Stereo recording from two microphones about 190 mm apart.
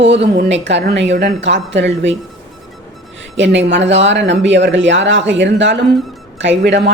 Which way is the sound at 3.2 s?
75° right (ahead or behind).